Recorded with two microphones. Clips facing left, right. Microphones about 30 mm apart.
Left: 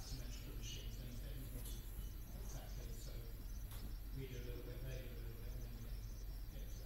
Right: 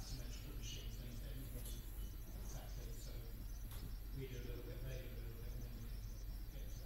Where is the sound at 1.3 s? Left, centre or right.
Right.